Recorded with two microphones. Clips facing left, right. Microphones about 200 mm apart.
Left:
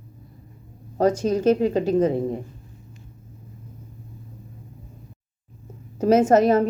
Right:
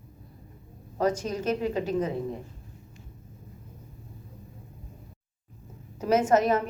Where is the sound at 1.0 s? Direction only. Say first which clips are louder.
Left 8 dB; 30° left (ahead or behind).